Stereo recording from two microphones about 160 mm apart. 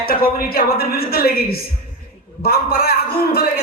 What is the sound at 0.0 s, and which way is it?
A man's voice, 70° left (ahead or behind).